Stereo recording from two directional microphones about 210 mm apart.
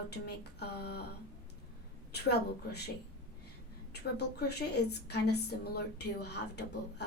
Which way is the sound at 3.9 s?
50° left (ahead or behind).